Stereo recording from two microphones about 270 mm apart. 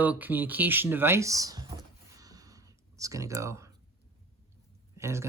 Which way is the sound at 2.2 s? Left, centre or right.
Centre.